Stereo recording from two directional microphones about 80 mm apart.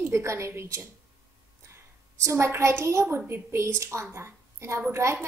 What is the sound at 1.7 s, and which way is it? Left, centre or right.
A woman's voice, right.